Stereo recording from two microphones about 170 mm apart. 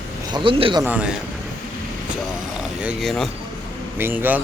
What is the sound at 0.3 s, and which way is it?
Speech, 30° right (ahead or behind).